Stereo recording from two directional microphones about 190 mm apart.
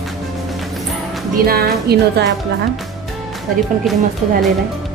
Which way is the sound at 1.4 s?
55° right (ahead or behind).